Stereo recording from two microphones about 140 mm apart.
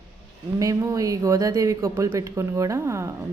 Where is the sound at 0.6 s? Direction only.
25° right (ahead or behind).